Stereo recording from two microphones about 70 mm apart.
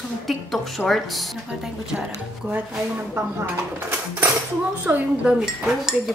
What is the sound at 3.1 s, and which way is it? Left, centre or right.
A woman's voice, right.